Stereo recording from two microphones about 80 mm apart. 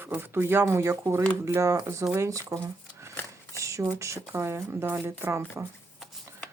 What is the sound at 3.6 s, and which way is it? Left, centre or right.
Speech, right.